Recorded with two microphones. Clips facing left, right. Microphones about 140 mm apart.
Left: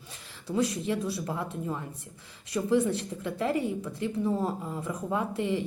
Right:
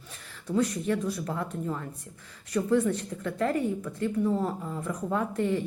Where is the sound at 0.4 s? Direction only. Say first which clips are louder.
Right 1 dB; 10° left (ahead or behind).